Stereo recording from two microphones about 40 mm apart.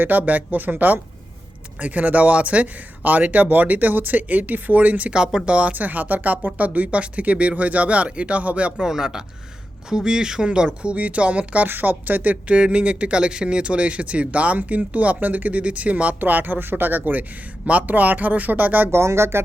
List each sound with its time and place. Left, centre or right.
0.0 s speech: right
5.1 s speech: right
5.7 s speech: right
8.8 s a man's voice: centre; by 11.7 s right
11.7 s speech: right
12.5 s speech: right
18.9 s speech: right